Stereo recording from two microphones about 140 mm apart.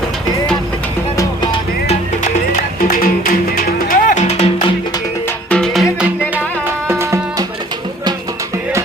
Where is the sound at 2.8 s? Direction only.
85° left; by 4.4 s 60° left (ahead or behind).